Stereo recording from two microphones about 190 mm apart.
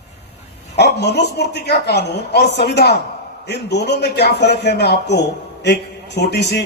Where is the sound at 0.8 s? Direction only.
60° left (ahead or behind).